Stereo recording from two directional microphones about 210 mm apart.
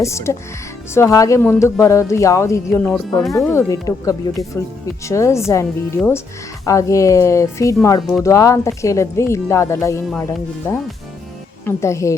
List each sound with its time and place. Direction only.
0.0 s speech: 15° left (ahead or behind)